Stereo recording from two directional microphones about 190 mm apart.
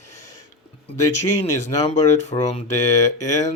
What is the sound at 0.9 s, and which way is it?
Speech, 15° left (ahead or behind).